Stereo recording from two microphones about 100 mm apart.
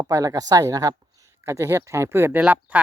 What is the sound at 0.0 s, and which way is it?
Speech, 35° right (ahead or behind).